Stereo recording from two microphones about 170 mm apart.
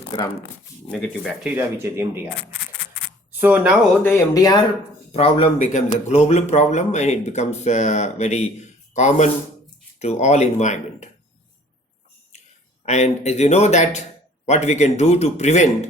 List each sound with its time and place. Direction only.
0.9 s speech: centre (ahead or behind)
1.5 s speech: 15° right (ahead or behind)
3.4 s speech: 10° right (ahead or behind)
4.0 s speech: 20° left (ahead or behind)
5.1 s a man's voice: 35° left (ahead or behind)
12.8 s a man's voice: 40° left (ahead or behind)